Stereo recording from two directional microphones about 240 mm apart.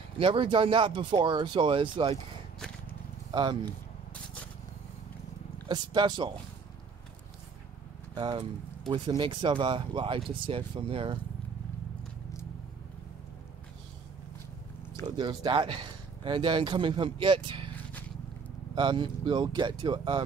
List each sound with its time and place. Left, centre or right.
0.2 s speech: right
3.3 s speech: centre
5.7 s speech: centre
8.1 s speech: centre
15.0 s speech: centre
18.8 s speech: centre